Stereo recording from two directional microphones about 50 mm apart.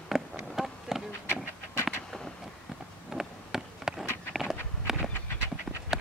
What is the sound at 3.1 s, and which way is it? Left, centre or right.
Insect, centre.